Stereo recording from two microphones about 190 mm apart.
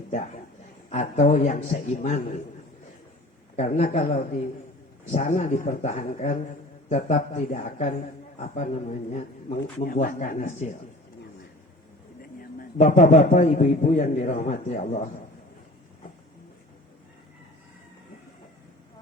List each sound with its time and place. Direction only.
0.9 s speech: 40° left (ahead or behind)
3.5 s speech: 35° left (ahead or behind)
12.8 s speech: 40° left (ahead or behind)